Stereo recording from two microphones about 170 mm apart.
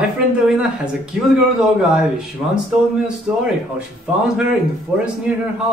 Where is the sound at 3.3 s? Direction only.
5° right (ahead or behind).